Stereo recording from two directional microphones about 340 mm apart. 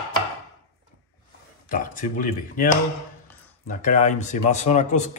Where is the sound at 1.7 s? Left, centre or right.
Left.